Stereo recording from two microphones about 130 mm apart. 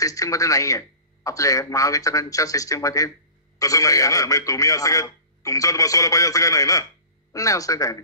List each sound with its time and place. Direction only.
0.0 s a man's voice: 25° left (ahead or behind)